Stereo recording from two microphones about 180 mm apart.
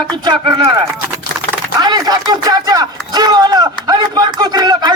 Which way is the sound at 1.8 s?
20° right (ahead or behind).